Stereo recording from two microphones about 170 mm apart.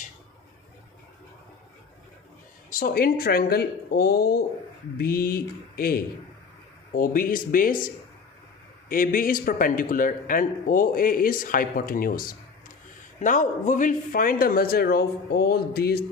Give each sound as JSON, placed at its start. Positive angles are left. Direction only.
{"t": 2.6, "sound": "a man's voice", "side_deg": 55}
{"t": 8.9, "sound": "a man's voice", "side_deg": 55}